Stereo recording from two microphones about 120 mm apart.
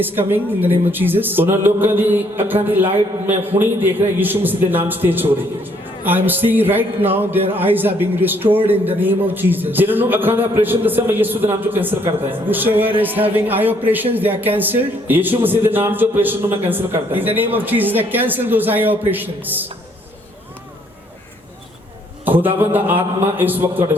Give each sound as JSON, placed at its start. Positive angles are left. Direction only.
{"t": 0.0, "sound": "speech", "side_deg": -15}
{"t": 22.2, "sound": "a sound", "side_deg": -15}
{"t": 22.7, "sound": "speech", "side_deg": -15}